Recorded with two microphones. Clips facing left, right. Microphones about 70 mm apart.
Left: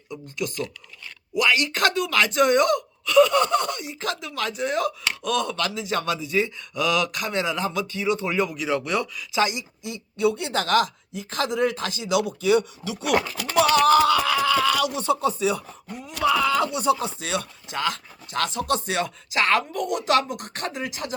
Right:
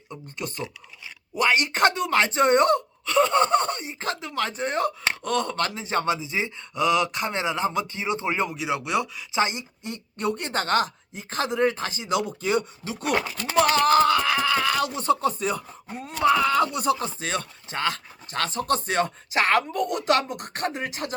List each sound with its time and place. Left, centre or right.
0.1 s speech: right
8.6 s speech: centre; by 13.1 s right
13.7 s a sound: right
14.9 s speech: right